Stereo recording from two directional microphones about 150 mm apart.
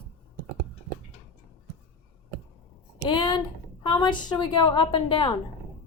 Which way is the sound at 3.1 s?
30° left (ahead or behind).